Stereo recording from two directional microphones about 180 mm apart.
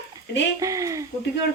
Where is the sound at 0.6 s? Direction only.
20° right (ahead or behind).